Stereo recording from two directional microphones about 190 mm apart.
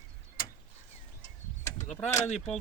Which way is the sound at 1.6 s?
10° left (ahead or behind).